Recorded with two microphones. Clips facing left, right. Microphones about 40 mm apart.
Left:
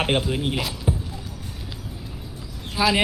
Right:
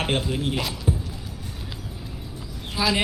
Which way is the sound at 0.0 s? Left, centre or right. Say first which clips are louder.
Left 2 dB; centre.